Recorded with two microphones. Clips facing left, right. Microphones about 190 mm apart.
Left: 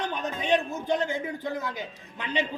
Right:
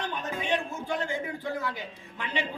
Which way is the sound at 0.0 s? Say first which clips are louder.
Left 2 dB; 20° left (ahead or behind).